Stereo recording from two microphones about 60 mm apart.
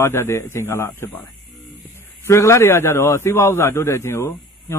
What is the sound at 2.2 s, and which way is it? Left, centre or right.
A man's voice, left.